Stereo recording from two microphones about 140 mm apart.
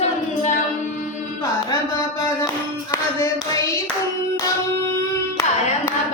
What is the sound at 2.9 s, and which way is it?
Hands, 25° left (ahead or behind).